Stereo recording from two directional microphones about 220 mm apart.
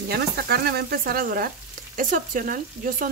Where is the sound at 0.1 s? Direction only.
45° right (ahead or behind).